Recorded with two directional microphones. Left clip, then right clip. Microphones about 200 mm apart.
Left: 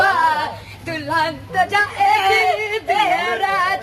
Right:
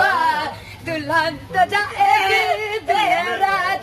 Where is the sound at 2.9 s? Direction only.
10° right (ahead or behind).